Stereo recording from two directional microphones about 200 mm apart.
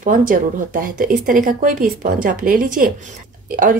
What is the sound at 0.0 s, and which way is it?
Speech, 40° right (ahead or behind).